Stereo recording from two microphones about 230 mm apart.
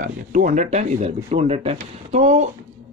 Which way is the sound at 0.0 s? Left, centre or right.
Right.